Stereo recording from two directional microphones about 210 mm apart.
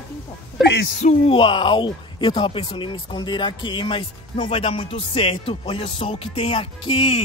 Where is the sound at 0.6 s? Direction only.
55° left (ahead or behind).